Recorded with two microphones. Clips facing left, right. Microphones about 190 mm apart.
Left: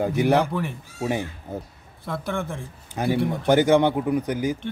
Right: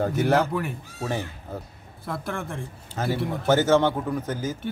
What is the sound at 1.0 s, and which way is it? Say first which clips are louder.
Speech: left 3 dB; 15° left (ahead or behind).